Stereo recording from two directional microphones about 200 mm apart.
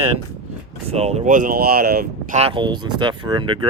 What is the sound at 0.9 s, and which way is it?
Speech, 30° right (ahead or behind).